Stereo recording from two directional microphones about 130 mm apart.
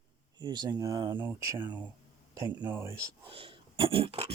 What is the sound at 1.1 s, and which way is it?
Speech, 20° right (ahead or behind).